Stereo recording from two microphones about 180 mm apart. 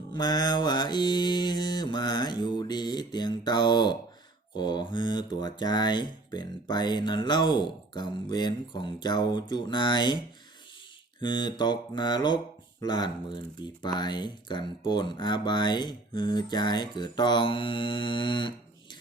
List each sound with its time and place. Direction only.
0.1 s mantra: 25° left (ahead or behind)
4.5 s speech: 25° left (ahead or behind)
11.2 s speech: 25° left (ahead or behind)